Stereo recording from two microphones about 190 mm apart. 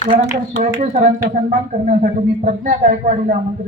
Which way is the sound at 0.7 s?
45° right (ahead or behind).